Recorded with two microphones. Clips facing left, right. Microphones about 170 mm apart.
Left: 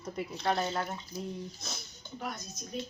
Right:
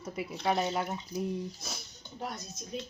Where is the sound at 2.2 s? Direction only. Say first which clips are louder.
Right 1 dB; 30° right (ahead or behind).